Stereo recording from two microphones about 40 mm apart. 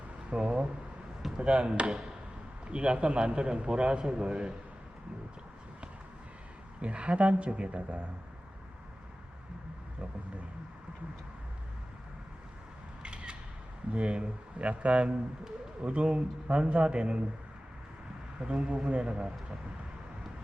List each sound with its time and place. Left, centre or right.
0.3 s a man's voice: right
6.8 s speech: right
13.0 s single-lens reflex camera: right
13.9 s a man's voice: right
18.3 s a man's voice: right